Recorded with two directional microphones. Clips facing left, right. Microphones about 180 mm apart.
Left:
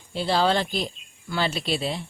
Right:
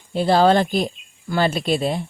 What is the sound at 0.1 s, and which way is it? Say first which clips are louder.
Speech: right 7 dB; 50° right (ahead or behind).